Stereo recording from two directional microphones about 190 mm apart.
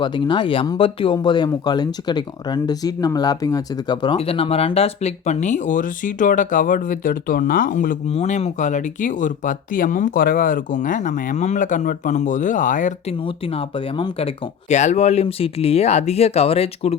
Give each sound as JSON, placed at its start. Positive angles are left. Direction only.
{"t": 0.0, "sound": "speech", "side_deg": 25}
{"t": 13.2, "sound": "speech", "side_deg": 30}